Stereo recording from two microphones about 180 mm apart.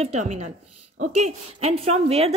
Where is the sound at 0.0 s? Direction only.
40° right (ahead or behind).